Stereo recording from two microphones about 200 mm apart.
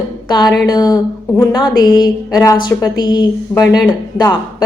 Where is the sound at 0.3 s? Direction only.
20° left (ahead or behind).